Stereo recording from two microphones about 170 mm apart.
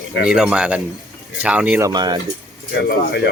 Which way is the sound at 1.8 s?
25° right (ahead or behind).